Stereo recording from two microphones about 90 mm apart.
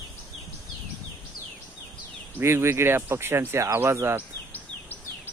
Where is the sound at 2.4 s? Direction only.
30° right (ahead or behind).